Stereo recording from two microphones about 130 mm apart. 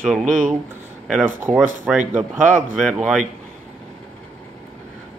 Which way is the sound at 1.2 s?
15° right (ahead or behind).